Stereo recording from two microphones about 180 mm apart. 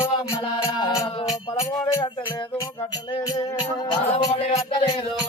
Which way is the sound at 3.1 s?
20° left (ahead or behind).